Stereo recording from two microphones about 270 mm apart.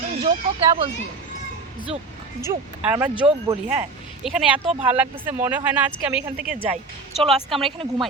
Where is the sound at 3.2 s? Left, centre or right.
Centre.